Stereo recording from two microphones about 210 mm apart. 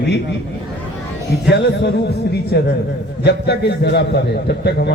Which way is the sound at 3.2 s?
55° left (ahead or behind).